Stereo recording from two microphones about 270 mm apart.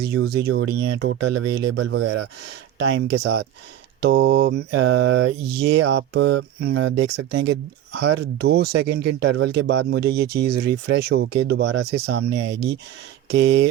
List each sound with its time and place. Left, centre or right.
0.0 s speech: right
1.2 s mantra: right
1.7 s speech: right
4.7 s mantra: right
5.5 s speech: right
7.2 s mantra: right
7.9 s speech: right